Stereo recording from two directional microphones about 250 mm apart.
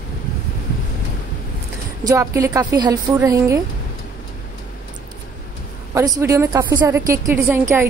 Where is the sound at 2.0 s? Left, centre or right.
Centre.